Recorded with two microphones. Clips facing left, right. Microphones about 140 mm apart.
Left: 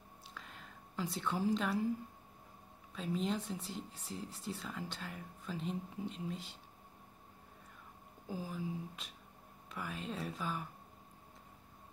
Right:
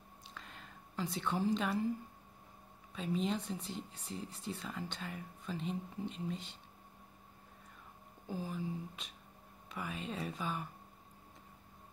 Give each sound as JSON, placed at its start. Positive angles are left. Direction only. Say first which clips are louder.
{"t": 0.3, "sound": "a sound", "louder": "even", "side_deg": 0}
{"t": 2.9, "sound": "speech", "louder": "right 1 dB", "side_deg": 0}
{"t": 8.3, "sound": "speech", "louder": "right 1 dB", "side_deg": 5}